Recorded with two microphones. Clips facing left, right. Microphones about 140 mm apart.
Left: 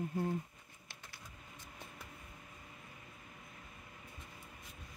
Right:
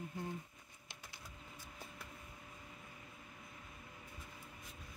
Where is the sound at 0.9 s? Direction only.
10° right (ahead or behind).